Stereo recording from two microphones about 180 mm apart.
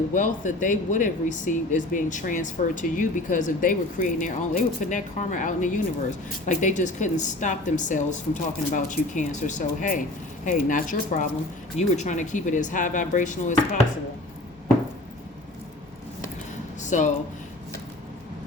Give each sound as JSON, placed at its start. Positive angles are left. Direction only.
{"t": 0.1, "sound": "speech", "side_deg": 45}
{"t": 16.8, "sound": "speech", "side_deg": 40}